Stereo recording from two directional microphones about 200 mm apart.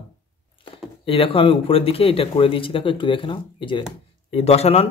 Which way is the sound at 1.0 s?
25° left (ahead or behind).